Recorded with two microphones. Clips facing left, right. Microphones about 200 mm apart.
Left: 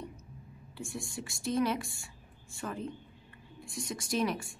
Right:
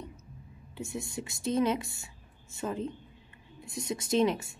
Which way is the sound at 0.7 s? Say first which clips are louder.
Right 3 dB; 20° right (ahead or behind).